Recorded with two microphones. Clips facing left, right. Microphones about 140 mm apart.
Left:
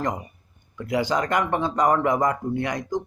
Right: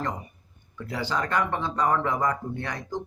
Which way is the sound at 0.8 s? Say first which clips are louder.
Left 6 dB; 15° left (ahead or behind).